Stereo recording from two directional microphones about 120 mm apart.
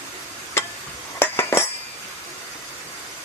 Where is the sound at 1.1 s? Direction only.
20° left (ahead or behind).